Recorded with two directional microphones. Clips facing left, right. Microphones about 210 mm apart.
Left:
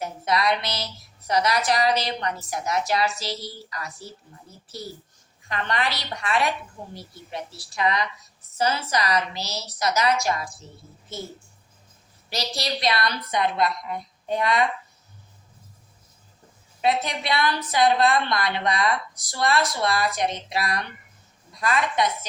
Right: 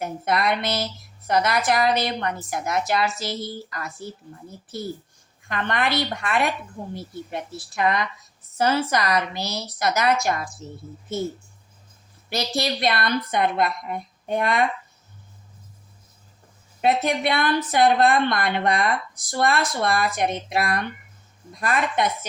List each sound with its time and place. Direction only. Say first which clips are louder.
0.0 s a woman's voice: right 1 dB; 55° right (ahead or behind)
5.5 s a woman's voice: right 3 dB; 55° right (ahead or behind)
12.3 s a woman's voice: right 4 dB; 55° right (ahead or behind)
16.8 s a woman's voice: right 3 dB; 55° right (ahead or behind)